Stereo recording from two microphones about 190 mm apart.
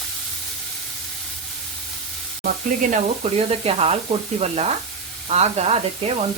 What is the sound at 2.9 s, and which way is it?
Sizzle, 30° right (ahead or behind).